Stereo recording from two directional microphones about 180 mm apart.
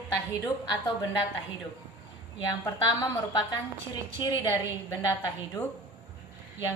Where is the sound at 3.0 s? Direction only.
25° left (ahead or behind).